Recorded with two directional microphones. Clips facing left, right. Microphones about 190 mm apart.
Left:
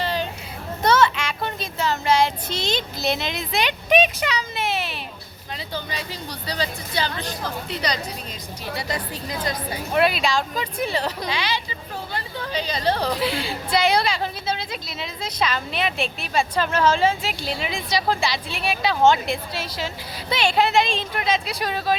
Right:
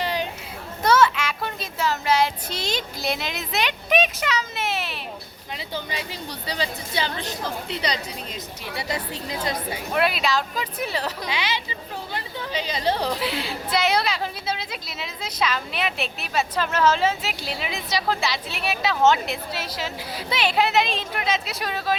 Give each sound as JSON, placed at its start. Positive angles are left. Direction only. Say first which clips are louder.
{"t": 0.0, "sound": "children playing", "louder": "left 1 dB", "side_deg": -15}
{"t": 0.9, "sound": "child singing", "louder": "even", "side_deg": -5}
{"t": 5.5, "sound": "a woman's voice", "louder": "even", "side_deg": -20}
{"t": 9.9, "sound": "a woman's voice", "louder": "left 2 dB", "side_deg": 0}
{"t": 11.3, "sound": "a woman's voice", "louder": "left 1 dB", "side_deg": -20}
{"t": 13.2, "sound": "a woman's voice", "louder": "left 2 dB", "side_deg": 0}